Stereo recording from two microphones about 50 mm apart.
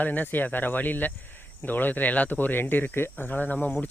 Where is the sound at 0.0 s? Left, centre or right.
Left.